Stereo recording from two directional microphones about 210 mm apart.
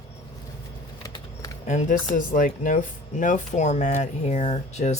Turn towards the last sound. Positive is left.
turn(degrees=30)  # may be behind; listen again after turning